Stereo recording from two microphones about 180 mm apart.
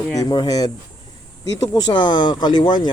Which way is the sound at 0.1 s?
20° left (ahead or behind).